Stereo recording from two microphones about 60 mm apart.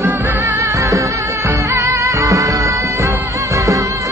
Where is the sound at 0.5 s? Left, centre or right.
Right.